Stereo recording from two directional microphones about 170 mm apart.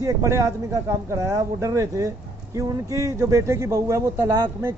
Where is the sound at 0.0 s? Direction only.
15° right (ahead or behind).